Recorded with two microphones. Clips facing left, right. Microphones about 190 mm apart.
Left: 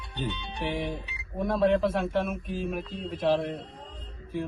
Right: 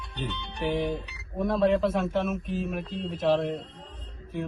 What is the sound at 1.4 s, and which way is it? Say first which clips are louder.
Speech: right 1 dB; centre (ahead or behind).